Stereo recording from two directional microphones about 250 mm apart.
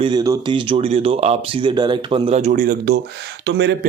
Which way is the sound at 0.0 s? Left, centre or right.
Centre.